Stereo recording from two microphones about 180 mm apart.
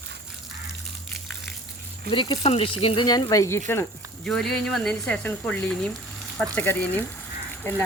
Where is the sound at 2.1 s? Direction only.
25° left (ahead or behind).